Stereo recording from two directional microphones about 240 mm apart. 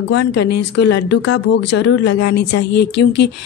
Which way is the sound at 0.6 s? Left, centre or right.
Left.